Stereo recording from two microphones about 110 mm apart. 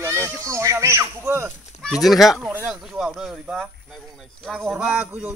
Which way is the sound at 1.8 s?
Centre (ahead or behind).